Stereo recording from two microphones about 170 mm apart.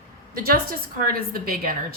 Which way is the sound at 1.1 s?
60° right (ahead or behind).